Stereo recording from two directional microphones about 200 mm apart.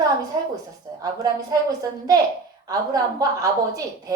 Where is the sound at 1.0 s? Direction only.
20° right (ahead or behind).